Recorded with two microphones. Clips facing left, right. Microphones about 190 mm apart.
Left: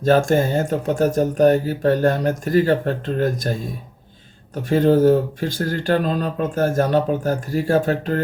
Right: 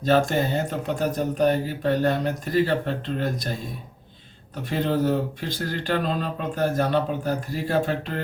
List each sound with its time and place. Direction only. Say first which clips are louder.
0.0 s speech: left 5 dB; 45° left (ahead or behind)
4.7 s speech: left 9 dB; 45° left (ahead or behind)